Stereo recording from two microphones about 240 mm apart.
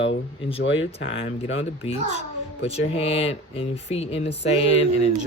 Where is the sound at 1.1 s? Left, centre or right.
Left.